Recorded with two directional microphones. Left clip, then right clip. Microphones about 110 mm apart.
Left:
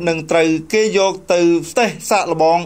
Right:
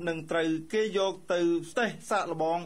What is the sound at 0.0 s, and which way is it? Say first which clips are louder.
Speech: left 15 dB; 15° left (ahead or behind).